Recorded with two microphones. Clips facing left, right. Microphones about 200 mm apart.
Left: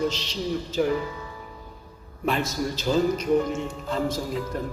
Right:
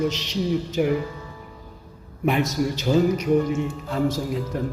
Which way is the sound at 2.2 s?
15° right (ahead or behind).